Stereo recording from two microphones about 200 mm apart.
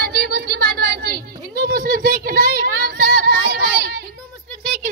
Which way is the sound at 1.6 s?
45° right (ahead or behind).